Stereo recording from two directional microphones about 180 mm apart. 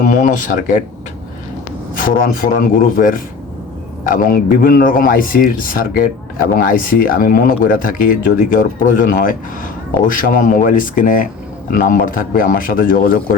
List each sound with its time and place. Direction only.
0.0 s a man's voice: 45° left (ahead or behind)
2.0 s a man's voice: 50° left (ahead or behind)